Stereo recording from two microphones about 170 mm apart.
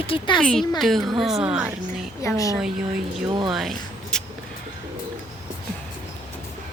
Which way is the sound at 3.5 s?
Centre (ahead or behind).